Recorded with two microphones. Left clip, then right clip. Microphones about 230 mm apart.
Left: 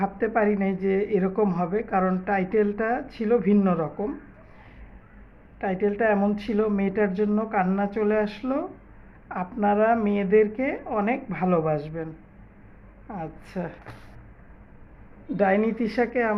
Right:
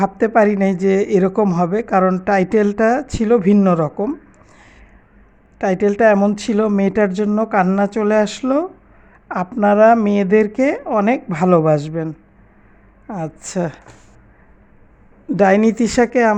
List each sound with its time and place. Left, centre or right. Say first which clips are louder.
0.0 s speech: right 10 dB; right
5.5 s speech: right 9 dB; right
15.4 s speech: right 9 dB; right